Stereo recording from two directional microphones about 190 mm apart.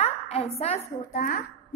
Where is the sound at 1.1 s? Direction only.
50° left (ahead or behind).